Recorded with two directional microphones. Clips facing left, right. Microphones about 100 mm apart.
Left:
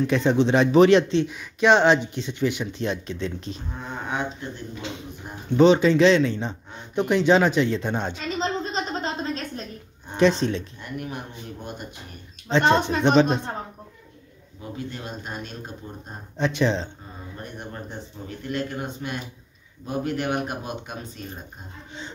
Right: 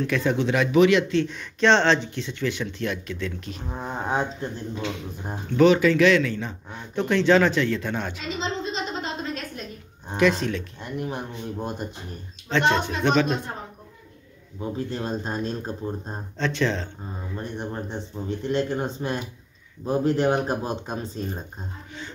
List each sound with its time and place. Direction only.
0.0 s speech: 20° left (ahead or behind)
1.1 s speech: 10° left (ahead or behind); by 3.6 s 25° left (ahead or behind)
3.7 s speech: 35° right (ahead or behind)
5.6 s speech: 25° left (ahead or behind)
8.4 s a sound: 40° left (ahead or behind)
10.1 s speech: 30° left (ahead or behind)
10.8 s speech: 25° right (ahead or behind)
12.4 s speech: 20° left (ahead or behind)
14.6 s speech: 30° right (ahead or behind)
16.3 s speech: 15° left (ahead or behind)
17.4 s speech: 30° right (ahead or behind)